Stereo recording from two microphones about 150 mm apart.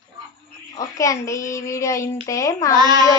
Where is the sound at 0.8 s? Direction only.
20° left (ahead or behind).